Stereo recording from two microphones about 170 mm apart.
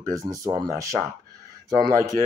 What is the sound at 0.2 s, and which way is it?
Speech, 15° right (ahead or behind).